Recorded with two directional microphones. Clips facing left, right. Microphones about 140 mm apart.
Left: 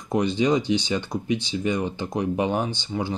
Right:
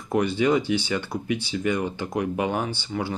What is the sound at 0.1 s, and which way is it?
Speech, 20° left (ahead or behind).